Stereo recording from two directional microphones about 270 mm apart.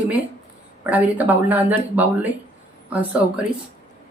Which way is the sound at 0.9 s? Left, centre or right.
Centre.